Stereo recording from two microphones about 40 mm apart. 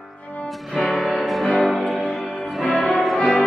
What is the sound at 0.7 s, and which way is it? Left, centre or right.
Music, centre.